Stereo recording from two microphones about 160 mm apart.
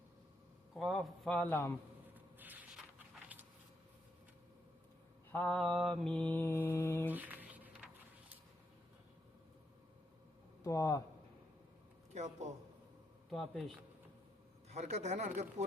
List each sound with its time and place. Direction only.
0.7 s a man's voice: centre (ahead or behind)
2.1 s a sound: 10° right (ahead or behind)
5.3 s a man's voice: 5° left (ahead or behind)
6.1 s mantra: 5° left (ahead or behind)
7.1 s a sound: 10° right (ahead or behind)
10.6 s speech: 20° left (ahead or behind)
12.1 s speech: 45° right (ahead or behind)
13.3 s a man's voice: centre (ahead or behind)
14.7 s speech: 45° right (ahead or behind)